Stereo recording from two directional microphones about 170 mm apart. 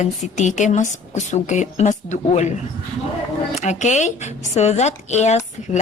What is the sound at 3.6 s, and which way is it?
A woman's voice, 45° left (ahead or behind).